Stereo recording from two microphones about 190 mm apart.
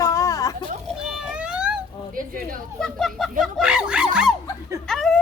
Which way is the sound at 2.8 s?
Centre (ahead or behind).